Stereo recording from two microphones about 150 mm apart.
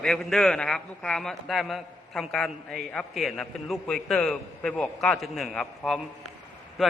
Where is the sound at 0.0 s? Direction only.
Centre (ahead or behind).